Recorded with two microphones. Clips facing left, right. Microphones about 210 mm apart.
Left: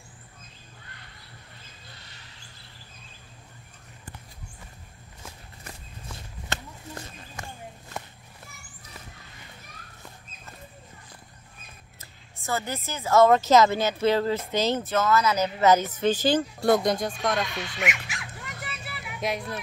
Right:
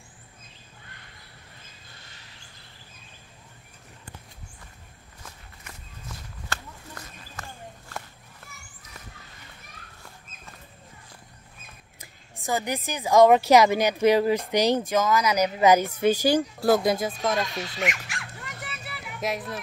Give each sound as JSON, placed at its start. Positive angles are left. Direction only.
{"t": 6.5, "sound": "a sound", "side_deg": 25}
{"t": 7.4, "sound": "walk", "side_deg": 15}
{"t": 12.0, "sound": "speech", "side_deg": -15}
{"t": 17.7, "sound": "dog", "side_deg": 0}